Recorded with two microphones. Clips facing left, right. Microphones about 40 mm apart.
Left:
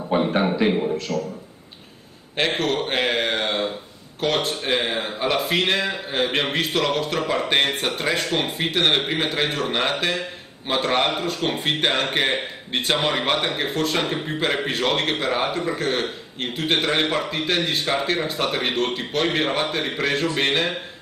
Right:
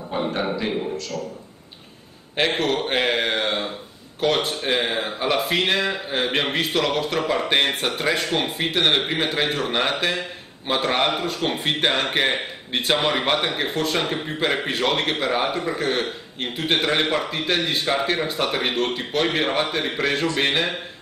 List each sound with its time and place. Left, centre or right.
0.1 s a sound: left
0.6 s a man's voice: centre
2.3 s a man's voice: centre